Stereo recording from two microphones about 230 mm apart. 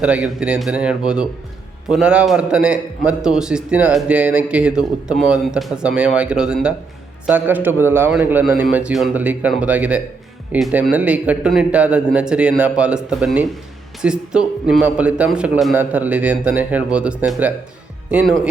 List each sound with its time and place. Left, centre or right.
0.0 s a man's voice: centre